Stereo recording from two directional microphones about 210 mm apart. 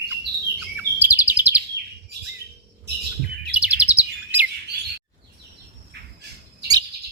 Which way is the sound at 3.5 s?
5° right (ahead or behind).